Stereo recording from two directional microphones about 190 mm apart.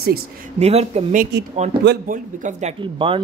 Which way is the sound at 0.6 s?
35° right (ahead or behind).